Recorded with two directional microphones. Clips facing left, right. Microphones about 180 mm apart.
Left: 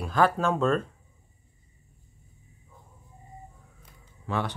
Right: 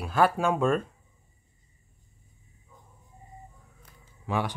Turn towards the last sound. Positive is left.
turn(degrees=-10)  # may be behind; listen again after turning